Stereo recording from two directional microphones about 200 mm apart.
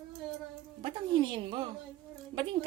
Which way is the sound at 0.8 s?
25° right (ahead or behind).